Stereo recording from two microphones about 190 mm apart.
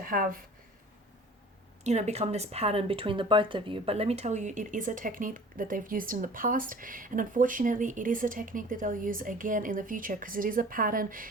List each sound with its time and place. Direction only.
0.0 s speech: 45° right (ahead or behind)
1.8 s speech: 35° right (ahead or behind)